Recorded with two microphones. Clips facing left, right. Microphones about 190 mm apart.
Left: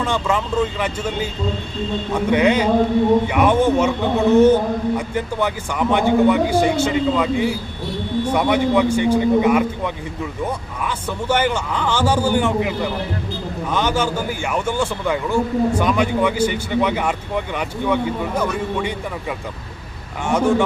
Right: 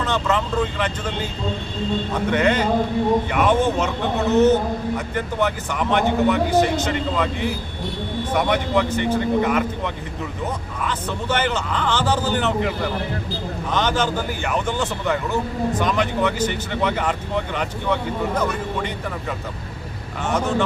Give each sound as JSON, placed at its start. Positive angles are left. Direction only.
{"t": 0.0, "sound": "a man's voice", "side_deg": 10}
{"t": 20.2, "sound": "a man's voice", "side_deg": 10}